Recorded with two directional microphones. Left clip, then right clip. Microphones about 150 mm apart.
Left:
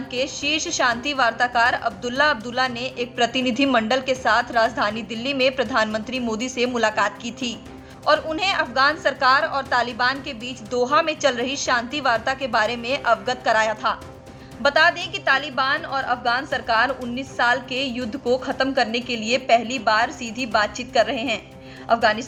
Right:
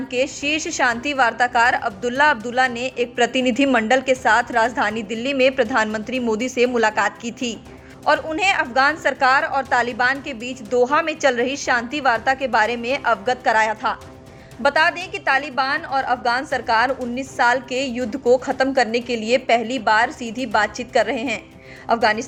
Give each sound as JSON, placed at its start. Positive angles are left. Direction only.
{"t": 0.1, "sound": "a woman's voice", "side_deg": -40}